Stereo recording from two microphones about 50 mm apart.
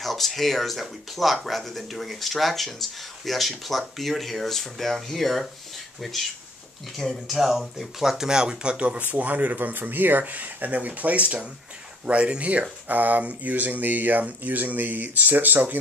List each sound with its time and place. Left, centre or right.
0.0 s speech: centre
7.0 s speech: centre; by 9.0 s right
9.0 s speech: right